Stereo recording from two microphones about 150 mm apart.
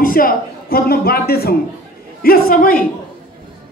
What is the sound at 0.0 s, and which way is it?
A man's voice, 70° left (ahead or behind).